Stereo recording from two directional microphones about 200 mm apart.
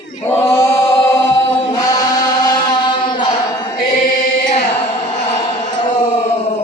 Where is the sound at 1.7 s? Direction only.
20° left (ahead or behind).